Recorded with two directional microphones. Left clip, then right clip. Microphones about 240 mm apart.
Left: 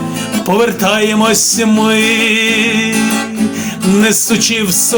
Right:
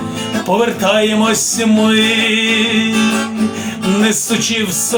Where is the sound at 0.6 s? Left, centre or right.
Left.